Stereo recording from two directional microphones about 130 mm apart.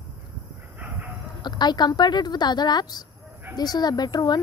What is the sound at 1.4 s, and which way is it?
Speech, 35° left (ahead or behind).